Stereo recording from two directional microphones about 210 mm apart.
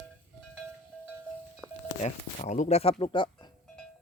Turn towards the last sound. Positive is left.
turn(degrees=20)  # may be behind; listen again after turning